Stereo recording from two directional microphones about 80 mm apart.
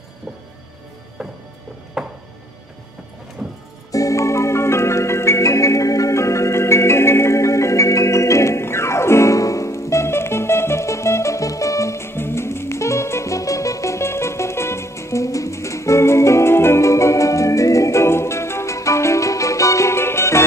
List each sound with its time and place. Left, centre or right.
2.0 s music: centre
3.4 s music: centre
3.9 s music: left